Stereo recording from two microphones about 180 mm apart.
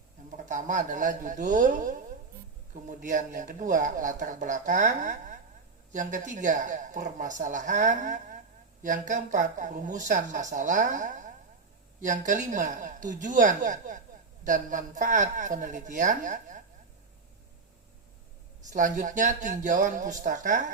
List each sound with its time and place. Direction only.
0.3 s speech: 45° right (ahead or behind)
18.7 s speech: 45° right (ahead or behind)